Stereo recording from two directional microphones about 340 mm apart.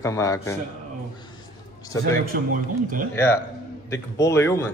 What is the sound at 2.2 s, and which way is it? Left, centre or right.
Speech, right.